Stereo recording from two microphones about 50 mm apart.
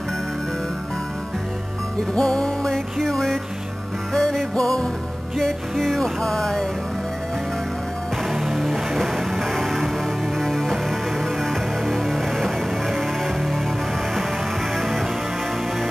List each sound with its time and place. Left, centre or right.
2.1 s music: centre
8.4 s music: centre
14.8 s music: centre